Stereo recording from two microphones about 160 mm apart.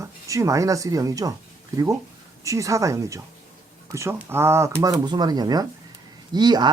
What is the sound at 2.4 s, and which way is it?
Speech, 20° right (ahead or behind).